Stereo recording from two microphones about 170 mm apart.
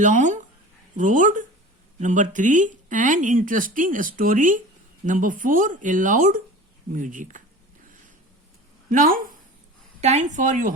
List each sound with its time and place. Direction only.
0.0 s speech: 45° right (ahead or behind)
8.9 s speech: 55° right (ahead or behind)
10.0 s speech: 40° right (ahead or behind)